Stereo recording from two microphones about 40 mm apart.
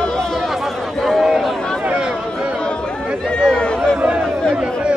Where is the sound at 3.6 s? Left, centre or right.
Left.